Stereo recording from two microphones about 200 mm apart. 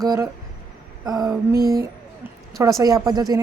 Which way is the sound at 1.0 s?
20° right (ahead or behind).